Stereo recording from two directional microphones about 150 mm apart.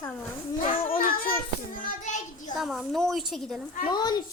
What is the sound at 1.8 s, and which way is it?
Speech, 55° left (ahead or behind).